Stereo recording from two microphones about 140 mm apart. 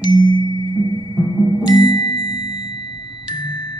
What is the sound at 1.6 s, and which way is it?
Music, 30° left (ahead or behind).